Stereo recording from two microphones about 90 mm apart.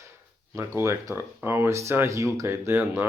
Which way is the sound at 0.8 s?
30° right (ahead or behind).